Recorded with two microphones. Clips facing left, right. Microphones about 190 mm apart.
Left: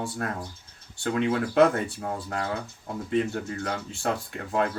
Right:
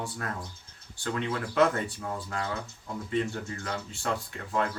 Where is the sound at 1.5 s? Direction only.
45° left (ahead or behind).